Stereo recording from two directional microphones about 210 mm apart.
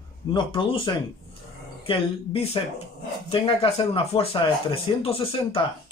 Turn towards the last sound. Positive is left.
turn(degrees=25)  # may be behind; listen again after turning